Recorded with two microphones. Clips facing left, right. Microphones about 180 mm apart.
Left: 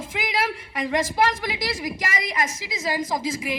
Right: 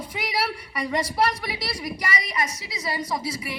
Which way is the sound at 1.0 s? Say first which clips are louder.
Left 2 dB; 45° left (ahead or behind).